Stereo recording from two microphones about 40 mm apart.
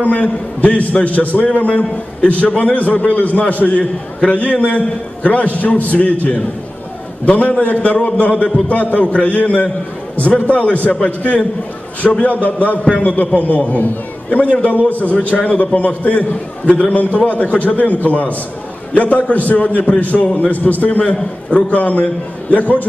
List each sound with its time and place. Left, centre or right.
0.0 s a man's voice: left
7.2 s a man's voice: left
18.9 s a man's voice: left